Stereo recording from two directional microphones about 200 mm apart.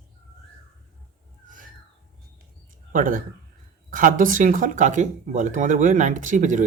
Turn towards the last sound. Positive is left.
turn(degrees=-40)  # may be behind; listen again after turning